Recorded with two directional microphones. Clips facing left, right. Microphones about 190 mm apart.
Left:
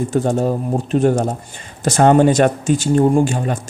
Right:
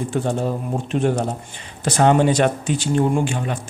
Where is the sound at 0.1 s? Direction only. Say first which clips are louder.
Left 5 dB; 45° left (ahead or behind).